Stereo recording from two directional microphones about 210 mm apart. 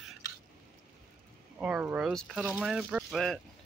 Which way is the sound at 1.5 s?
5° right (ahead or behind).